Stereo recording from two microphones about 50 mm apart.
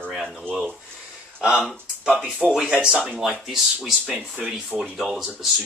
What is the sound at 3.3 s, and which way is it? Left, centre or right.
Speech, centre.